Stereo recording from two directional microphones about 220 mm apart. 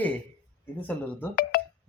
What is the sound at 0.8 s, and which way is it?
Speech, 5° left (ahead or behind).